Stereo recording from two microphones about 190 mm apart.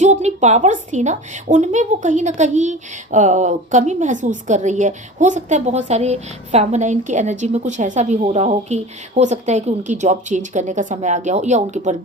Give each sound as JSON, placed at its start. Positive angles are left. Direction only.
{"t": 0.0, "sound": "a woman's voice", "side_deg": -35}